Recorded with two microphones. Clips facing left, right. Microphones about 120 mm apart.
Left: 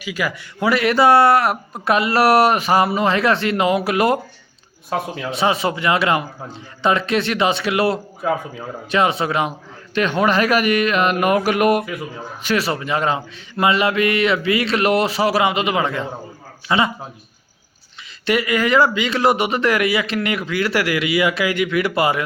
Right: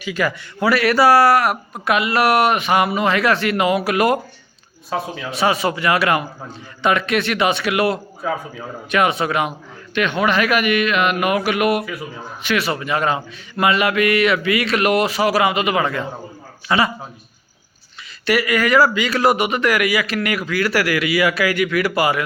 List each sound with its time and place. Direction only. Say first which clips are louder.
0.0 s speech: right 3 dB; 10° left (ahead or behind); by 4.2 s 25° left (ahead or behind)
5.3 s speech: even; 25° left (ahead or behind)
8.2 s speech: left 2 dB; 5° left (ahead or behind)
8.9 s a man's voice: even; 25° left (ahead or behind)
18.3 s speech: right 1 dB; 25° left (ahead or behind)